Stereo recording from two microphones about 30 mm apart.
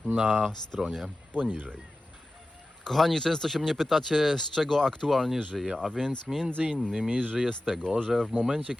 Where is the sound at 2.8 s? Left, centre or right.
Centre.